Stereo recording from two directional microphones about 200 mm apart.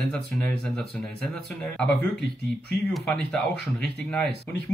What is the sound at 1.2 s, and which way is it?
Speech, centre (ahead or behind).